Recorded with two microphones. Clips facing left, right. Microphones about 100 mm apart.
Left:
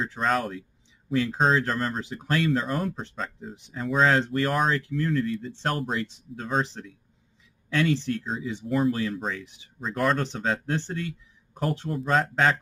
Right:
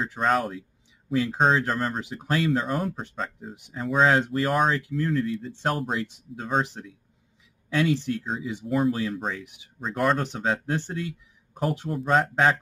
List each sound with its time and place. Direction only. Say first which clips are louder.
0.0 s speech: right 2 dB; 10° right (ahead or behind)